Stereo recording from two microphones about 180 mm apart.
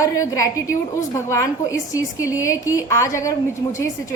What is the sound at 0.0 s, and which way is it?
A woman's voice, 20° left (ahead or behind).